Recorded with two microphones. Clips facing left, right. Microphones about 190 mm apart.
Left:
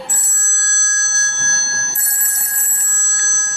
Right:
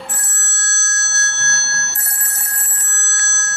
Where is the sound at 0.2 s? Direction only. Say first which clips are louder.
Right 2 dB; 65° right (ahead or behind).